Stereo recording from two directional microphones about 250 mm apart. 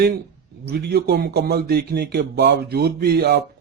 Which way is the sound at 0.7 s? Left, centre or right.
Right.